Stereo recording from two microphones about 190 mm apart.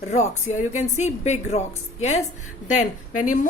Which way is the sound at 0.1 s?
40° left (ahead or behind).